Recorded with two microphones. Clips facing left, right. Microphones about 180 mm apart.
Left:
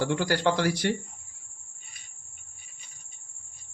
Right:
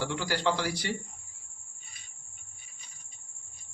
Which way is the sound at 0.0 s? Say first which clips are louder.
Left 5 dB; 55° left (ahead or behind).